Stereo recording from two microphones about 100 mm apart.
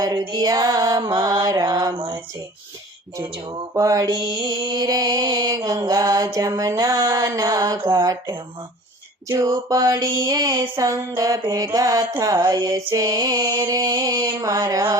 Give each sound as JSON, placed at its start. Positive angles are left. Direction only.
{"t": 0.0, "sound": "mantra", "side_deg": -40}
{"t": 2.0, "sound": "speech", "side_deg": -65}
{"t": 3.8, "sound": "mantra", "side_deg": -35}
{"t": 9.4, "sound": "mantra", "side_deg": -35}
{"t": 13.6, "sound": "mantra", "side_deg": -35}